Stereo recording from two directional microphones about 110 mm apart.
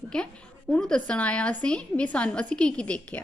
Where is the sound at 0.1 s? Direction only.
5° left (ahead or behind).